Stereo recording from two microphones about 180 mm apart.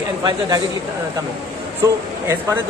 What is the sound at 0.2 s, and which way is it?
Speech, 25° right (ahead or behind).